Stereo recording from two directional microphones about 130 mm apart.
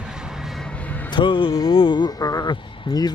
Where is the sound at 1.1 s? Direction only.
40° left (ahead or behind).